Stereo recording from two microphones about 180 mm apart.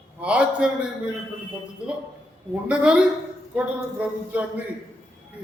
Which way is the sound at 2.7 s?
5° right (ahead or behind).